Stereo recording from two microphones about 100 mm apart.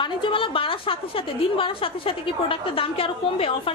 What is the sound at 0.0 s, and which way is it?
A woman's voice, 55° left (ahead or behind).